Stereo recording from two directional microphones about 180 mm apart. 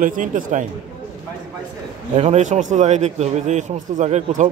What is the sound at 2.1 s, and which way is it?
A man's voice, 40° right (ahead or behind).